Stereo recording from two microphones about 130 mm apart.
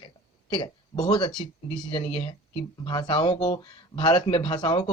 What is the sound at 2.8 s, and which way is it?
Speech, 40° left (ahead or behind).